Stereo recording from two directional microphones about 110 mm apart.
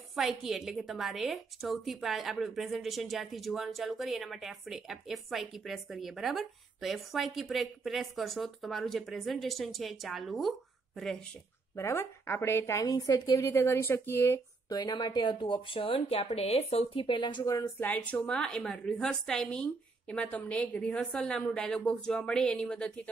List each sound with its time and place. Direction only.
0.1 s a woman's voice: centre (ahead or behind)
11.7 s speech: 25° left (ahead or behind)
14.7 s speech: 40° left (ahead or behind)
17.7 s a woman's voice: 15° left (ahead or behind)